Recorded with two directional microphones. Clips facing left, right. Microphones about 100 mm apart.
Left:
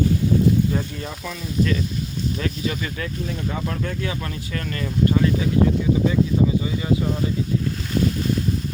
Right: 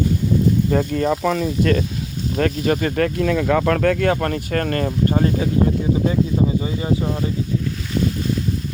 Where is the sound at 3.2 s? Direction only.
85° right; by 5.3 s 40° right (ahead or behind).